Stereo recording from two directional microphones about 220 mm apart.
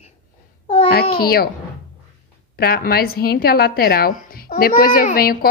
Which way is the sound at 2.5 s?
45° left (ahead or behind).